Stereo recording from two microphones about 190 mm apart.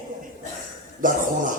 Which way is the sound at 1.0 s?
45° right (ahead or behind).